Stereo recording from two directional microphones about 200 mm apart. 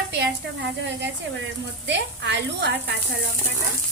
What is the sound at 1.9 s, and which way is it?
Speech, 60° right (ahead or behind).